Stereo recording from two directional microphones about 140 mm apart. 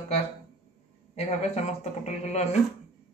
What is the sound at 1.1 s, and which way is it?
A man's voice, 50° left (ahead or behind).